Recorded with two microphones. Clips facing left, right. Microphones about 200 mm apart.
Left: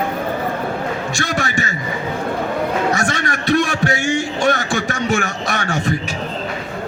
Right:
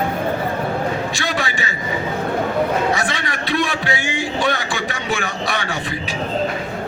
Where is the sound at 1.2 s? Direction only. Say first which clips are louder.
Left 2 dB; 45° left (ahead or behind).